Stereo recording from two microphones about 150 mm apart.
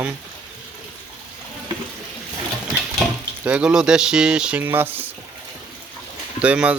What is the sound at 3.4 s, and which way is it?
Speech, 10° right (ahead or behind).